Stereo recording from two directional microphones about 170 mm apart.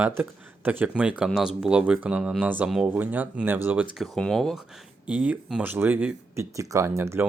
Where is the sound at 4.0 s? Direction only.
Centre (ahead or behind).